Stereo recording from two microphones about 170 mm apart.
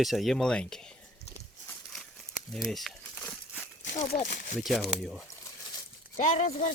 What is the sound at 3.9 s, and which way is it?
Speech, 40° left (ahead or behind).